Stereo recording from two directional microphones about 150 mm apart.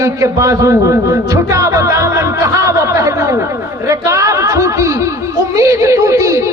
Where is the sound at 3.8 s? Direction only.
20° right (ahead or behind).